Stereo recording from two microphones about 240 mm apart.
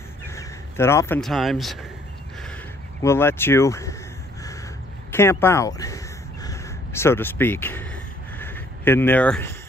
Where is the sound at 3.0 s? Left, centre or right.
Centre.